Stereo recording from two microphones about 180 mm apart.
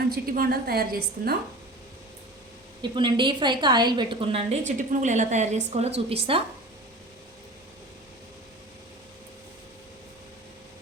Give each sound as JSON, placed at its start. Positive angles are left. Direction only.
{"t": 0.1, "sound": "a woman's voice", "side_deg": -55}
{"t": 2.9, "sound": "a woman's voice", "side_deg": -25}